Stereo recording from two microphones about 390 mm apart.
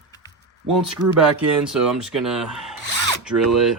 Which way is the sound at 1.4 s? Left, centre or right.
Centre.